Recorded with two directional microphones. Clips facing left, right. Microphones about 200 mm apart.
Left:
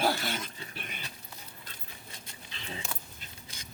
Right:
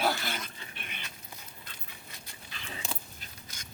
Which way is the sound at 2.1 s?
25° left (ahead or behind).